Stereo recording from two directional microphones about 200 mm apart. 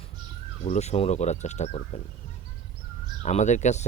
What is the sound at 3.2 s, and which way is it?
Speech, 35° left (ahead or behind).